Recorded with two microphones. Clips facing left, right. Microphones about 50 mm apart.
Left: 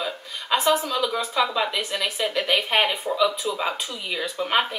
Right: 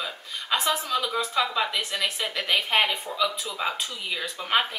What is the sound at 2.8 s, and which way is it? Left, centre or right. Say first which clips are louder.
Speech: left 3 dB; left.